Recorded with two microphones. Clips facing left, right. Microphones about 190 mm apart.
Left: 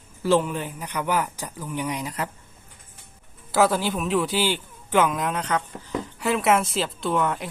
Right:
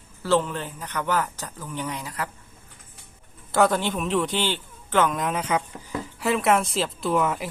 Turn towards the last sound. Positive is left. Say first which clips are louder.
# right 1 dB
turn(degrees=-5)  # may be behind; listen again after turning